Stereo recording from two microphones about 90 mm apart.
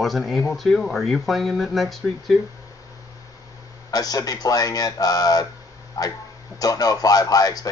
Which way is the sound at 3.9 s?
45° left (ahead or behind).